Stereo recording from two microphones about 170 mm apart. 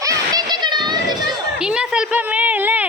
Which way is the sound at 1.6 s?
5° right (ahead or behind).